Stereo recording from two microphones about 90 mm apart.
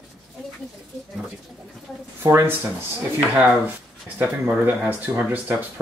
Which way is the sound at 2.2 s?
25° right (ahead or behind).